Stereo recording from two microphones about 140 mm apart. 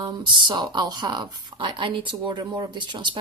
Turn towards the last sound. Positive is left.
turn(degrees=-35)  # may be behind; listen again after turning